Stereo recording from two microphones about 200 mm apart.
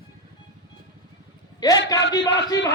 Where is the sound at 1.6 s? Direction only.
20° left (ahead or behind).